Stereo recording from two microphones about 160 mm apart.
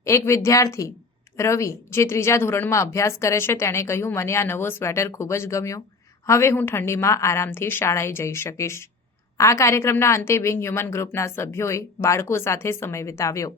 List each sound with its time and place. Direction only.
0.0 s speech: 20° left (ahead or behind)